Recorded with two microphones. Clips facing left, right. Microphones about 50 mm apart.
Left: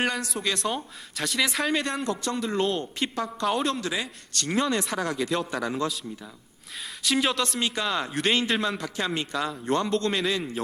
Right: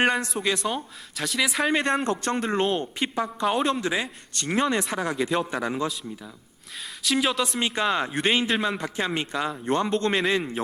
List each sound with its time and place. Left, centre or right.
0.0 s speech: right
0.3 s speech: centre
1.6 s a man's voice: right
2.6 s a man's voice: right
7.0 s speech: centre
7.6 s a man's voice: right